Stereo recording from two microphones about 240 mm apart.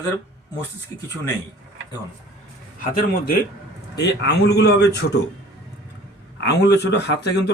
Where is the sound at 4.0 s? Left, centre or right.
Left.